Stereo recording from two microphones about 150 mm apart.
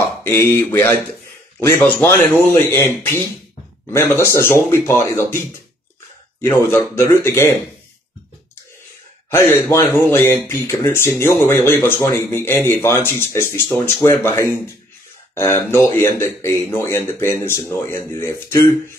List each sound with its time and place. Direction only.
0.2 s speech: 15° left (ahead or behind)
3.9 s speech: 15° left (ahead or behind)
6.4 s speech: 15° left (ahead or behind)
9.3 s speech: 15° left (ahead or behind)
15.7 s speech: 15° left (ahead or behind)